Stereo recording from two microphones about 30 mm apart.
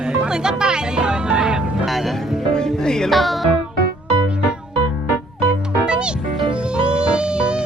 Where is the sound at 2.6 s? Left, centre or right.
Centre.